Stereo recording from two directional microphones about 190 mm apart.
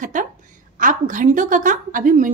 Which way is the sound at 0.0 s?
45° right (ahead or behind).